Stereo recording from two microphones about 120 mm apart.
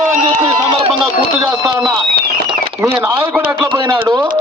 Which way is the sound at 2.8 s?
25° right (ahead or behind).